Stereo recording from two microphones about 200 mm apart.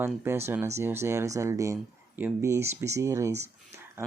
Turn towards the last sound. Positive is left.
turn(degrees=-15)  # may be behind; listen again after turning